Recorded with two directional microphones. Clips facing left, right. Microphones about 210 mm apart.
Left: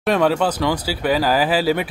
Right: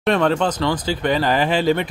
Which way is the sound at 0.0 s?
5° left (ahead or behind).